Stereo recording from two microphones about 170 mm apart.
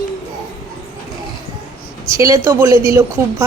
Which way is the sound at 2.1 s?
20° right (ahead or behind).